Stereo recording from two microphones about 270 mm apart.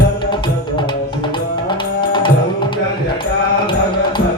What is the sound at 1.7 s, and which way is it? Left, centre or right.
Music, centre.